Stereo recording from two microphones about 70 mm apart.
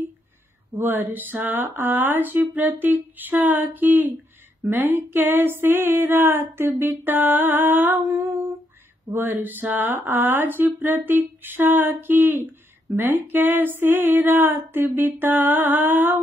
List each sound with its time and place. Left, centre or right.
0.7 s speech: right
4.6 s a sound: right
12.9 s speech: right